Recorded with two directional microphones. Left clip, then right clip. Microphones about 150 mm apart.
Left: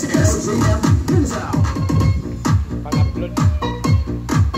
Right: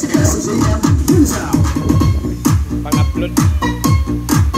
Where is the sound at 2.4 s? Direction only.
10° right (ahead or behind).